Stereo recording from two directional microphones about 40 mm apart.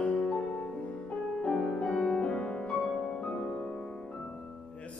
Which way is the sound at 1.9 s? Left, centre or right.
Centre.